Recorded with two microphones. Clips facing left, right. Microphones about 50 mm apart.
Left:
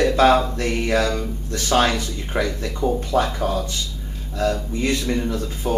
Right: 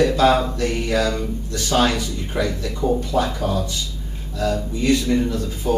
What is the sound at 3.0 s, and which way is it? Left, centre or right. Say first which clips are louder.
Speech: left 1 dB; left.